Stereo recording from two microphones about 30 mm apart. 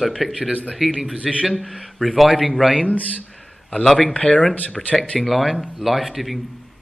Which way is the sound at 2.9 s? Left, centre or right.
Left.